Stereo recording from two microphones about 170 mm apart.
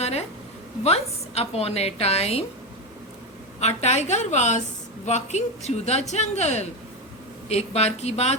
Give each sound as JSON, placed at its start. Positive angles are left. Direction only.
{"t": 0.0, "sound": "a sound", "side_deg": 40}
{"t": 0.9, "sound": "a woman's voice", "side_deg": 40}
{"t": 3.6, "sound": "a woman's voice", "side_deg": 40}